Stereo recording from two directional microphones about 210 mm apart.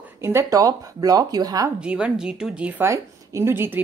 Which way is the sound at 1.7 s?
5° right (ahead or behind).